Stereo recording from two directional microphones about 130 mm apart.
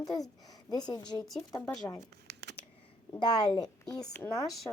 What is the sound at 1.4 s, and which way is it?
Speech, 25° left (ahead or behind).